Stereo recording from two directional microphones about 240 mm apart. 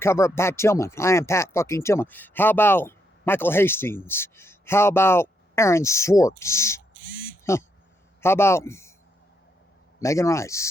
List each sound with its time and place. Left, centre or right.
0.0 s speech: centre
10.0 s speech: centre